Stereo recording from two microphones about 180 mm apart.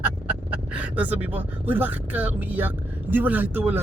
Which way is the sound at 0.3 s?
5° right (ahead or behind).